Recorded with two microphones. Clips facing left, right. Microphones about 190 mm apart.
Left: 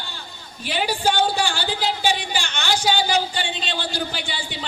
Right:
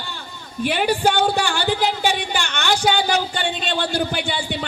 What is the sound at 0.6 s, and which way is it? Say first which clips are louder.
Speech: right 4 dB; 55° right (ahead or behind).